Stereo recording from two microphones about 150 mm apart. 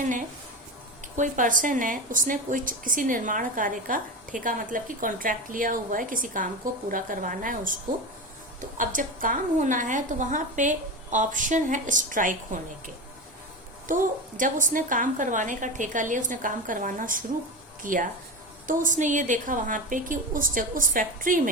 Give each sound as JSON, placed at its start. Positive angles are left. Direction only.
{"t": 1.1, "sound": "a woman's voice", "side_deg": -60}
{"t": 8.8, "sound": "a woman's voice", "side_deg": -65}
{"t": 13.8, "sound": "a woman's voice", "side_deg": -60}